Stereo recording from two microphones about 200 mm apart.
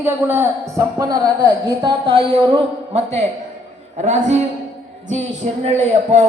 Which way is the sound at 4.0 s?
35° right (ahead or behind).